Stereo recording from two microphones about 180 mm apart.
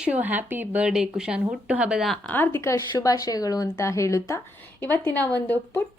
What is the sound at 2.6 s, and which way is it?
A woman's voice, 15° left (ahead or behind).